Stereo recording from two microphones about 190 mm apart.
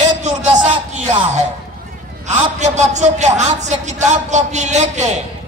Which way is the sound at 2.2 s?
40° right (ahead or behind).